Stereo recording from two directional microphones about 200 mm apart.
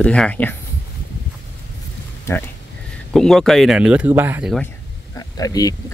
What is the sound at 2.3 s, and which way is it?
Speech, 10° left (ahead or behind).